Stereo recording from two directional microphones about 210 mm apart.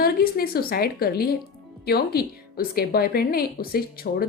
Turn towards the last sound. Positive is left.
turn(degrees=45)  # may be behind; listen again after turning